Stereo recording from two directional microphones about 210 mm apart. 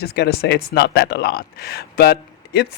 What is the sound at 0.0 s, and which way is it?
Speech, 50° left (ahead or behind).